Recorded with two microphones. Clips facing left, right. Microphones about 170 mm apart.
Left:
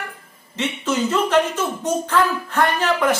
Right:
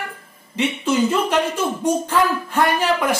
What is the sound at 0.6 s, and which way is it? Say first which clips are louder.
Speech: right 3 dB; 10° right (ahead or behind).